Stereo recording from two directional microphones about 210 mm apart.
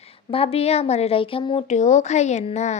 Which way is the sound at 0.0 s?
25° left (ahead or behind).